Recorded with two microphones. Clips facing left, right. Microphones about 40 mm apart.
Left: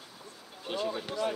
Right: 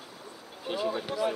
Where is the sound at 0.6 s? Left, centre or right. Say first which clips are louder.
Right 3 dB; centre.